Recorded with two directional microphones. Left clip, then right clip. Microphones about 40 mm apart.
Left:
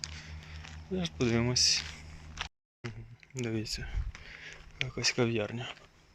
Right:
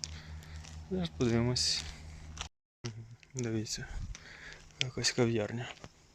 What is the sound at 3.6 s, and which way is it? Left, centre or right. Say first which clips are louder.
Speech: left 1 dB; right.